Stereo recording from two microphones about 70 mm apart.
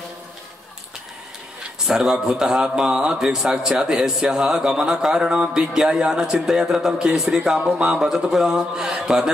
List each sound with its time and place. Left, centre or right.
1.9 s a man's voice: centre